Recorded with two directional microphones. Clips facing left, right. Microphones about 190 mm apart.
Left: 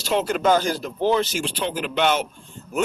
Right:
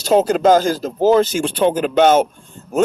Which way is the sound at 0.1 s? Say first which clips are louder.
Right 7 dB; 40° right (ahead or behind).